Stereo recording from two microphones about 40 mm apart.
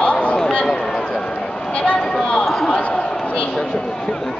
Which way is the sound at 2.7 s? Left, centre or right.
Left.